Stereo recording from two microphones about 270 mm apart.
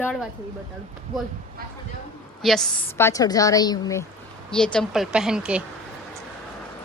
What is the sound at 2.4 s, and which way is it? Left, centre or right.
A woman's voice, centre.